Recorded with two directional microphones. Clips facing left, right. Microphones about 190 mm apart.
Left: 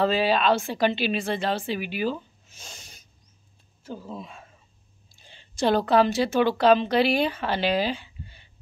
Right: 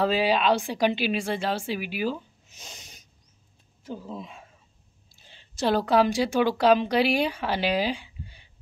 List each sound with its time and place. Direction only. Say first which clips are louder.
0.0 s speech: left 1 dB; 10° right (ahead or behind)
5.1 s speech: left 2 dB; centre (ahead or behind)